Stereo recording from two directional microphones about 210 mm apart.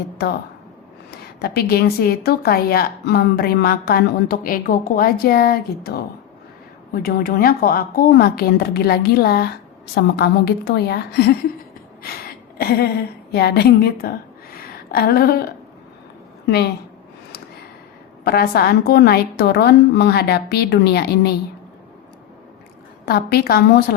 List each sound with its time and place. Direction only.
1.4 s a woman's voice: 50° left (ahead or behind)
14.5 s a sound: 45° left (ahead or behind)
18.3 s a woman's voice: 45° left (ahead or behind)
23.0 s a woman's voice: 45° left (ahead or behind)